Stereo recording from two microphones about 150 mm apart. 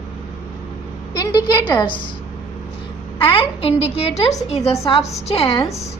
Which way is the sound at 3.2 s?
35° left (ahead or behind).